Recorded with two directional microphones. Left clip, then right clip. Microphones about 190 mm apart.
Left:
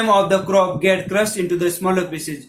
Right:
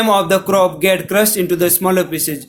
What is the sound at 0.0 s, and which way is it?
Speech, 50° right (ahead or behind).